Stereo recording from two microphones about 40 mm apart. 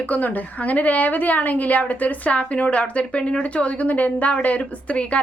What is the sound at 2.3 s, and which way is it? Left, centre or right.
A woman's voice, left.